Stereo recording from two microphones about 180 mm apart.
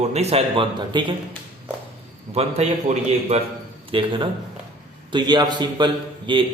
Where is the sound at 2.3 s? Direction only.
35° right (ahead or behind).